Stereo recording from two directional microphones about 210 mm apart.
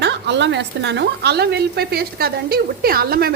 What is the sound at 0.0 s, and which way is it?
Speech, 55° right (ahead or behind).